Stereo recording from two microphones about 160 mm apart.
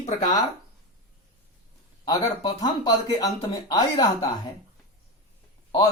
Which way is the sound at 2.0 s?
25° left (ahead or behind).